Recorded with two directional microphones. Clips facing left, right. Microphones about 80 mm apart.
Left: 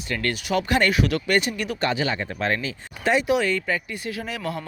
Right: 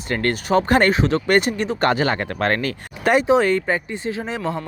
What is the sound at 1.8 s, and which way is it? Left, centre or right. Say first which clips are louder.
Speech: right 5 dB; right.